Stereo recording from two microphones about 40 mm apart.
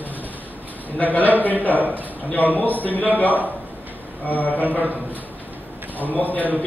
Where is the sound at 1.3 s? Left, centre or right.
Left.